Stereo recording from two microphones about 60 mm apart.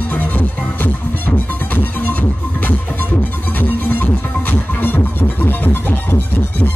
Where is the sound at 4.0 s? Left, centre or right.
Left.